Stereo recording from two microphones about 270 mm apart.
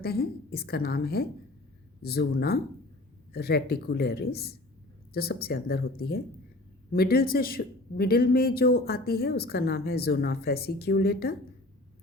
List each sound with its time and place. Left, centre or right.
0.0 s speech: left